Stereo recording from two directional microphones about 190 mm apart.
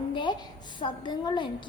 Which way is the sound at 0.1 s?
25° left (ahead or behind).